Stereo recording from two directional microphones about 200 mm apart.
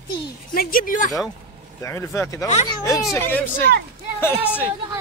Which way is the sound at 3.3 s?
10° left (ahead or behind).